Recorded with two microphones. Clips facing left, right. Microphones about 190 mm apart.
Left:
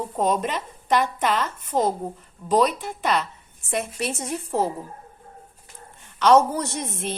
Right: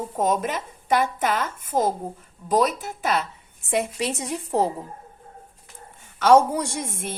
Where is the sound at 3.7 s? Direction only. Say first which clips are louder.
Right 2 dB; 15° right (ahead or behind).